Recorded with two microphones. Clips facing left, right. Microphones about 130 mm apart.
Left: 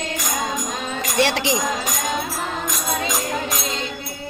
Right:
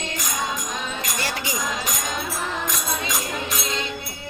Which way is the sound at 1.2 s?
90° left.